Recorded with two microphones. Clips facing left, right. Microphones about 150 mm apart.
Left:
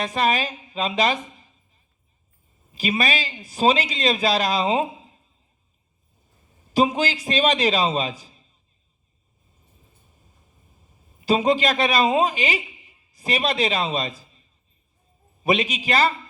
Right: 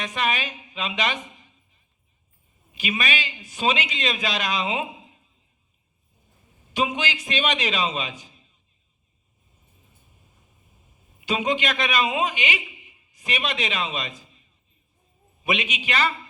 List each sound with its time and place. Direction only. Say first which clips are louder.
0.0 s a man's voice: left 5 dB; 35° left (ahead or behind)
1.4 s a sound: left 1 dB; 35° left (ahead or behind)
2.7 s a man's voice: left 4 dB; 35° left (ahead or behind)
6.7 s a man's voice: left 5 dB; 35° left (ahead or behind)
11.2 s a man's voice: left 5 dB; 35° left (ahead or behind)